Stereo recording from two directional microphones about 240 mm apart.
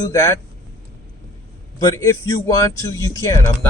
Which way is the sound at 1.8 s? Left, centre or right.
Centre.